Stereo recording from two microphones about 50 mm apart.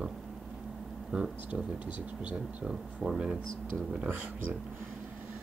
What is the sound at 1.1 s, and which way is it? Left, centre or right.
Speech, right.